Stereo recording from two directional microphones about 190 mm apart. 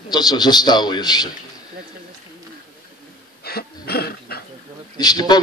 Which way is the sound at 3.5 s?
55° left (ahead or behind).